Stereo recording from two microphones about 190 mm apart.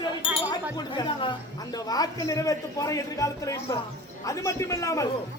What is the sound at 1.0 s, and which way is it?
A man's voice, 25° left (ahead or behind).